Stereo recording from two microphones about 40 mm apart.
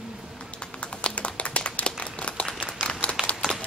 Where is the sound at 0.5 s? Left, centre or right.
Left.